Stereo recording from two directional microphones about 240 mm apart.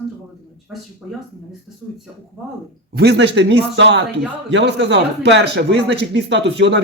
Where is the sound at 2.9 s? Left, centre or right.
Right.